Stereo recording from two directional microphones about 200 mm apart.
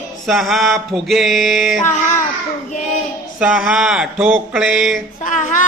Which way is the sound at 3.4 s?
5° right (ahead or behind).